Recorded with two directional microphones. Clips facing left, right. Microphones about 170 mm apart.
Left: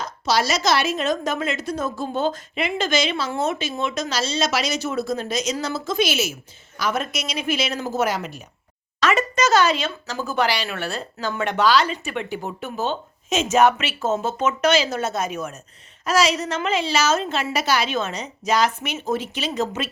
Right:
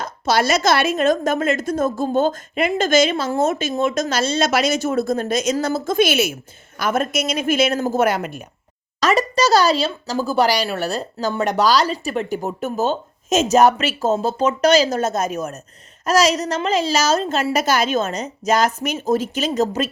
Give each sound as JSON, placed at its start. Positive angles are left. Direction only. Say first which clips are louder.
{"t": 0.0, "sound": "a woman's voice", "louder": "right 3 dB", "side_deg": -55}
{"t": 9.0, "sound": "a woman's voice", "louder": "right 3 dB", "side_deg": -35}